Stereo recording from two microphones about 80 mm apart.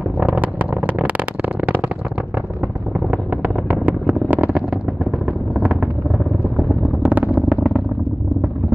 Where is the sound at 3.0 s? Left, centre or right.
Right.